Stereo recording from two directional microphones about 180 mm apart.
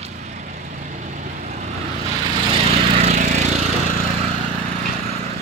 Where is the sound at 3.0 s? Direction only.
40° right (ahead or behind).